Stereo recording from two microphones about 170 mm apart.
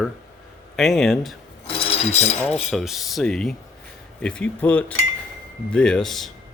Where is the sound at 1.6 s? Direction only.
35° left (ahead or behind).